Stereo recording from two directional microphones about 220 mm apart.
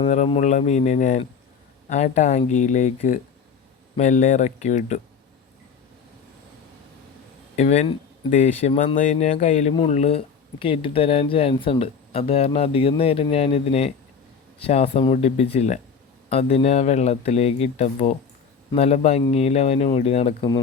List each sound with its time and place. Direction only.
0.1 s speech: 30° left (ahead or behind)
7.5 s speech: 30° left (ahead or behind)